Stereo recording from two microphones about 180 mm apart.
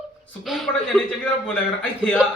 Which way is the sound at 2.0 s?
Centre (ahead or behind).